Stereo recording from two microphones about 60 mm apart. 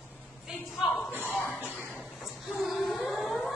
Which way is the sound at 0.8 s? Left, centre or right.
Centre.